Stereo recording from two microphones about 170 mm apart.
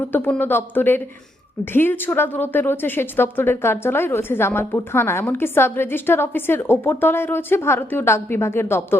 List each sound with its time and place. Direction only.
0.0 s a woman's voice: 10° left (ahead or behind)